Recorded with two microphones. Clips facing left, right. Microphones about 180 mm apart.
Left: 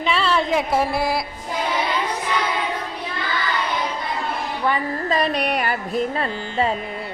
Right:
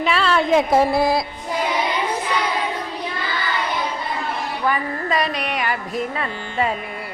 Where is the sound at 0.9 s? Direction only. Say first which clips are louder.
Right 4 dB; 20° right (ahead or behind).